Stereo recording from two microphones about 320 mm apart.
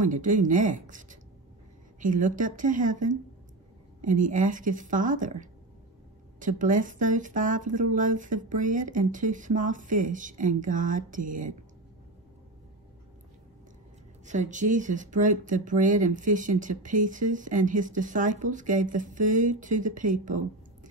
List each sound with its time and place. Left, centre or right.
0.0 s speech: right
14.2 s speech: right